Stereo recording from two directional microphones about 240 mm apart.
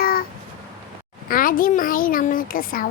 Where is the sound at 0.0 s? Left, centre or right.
Left.